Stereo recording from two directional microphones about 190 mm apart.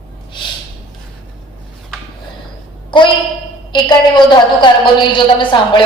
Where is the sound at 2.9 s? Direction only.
25° left (ahead or behind).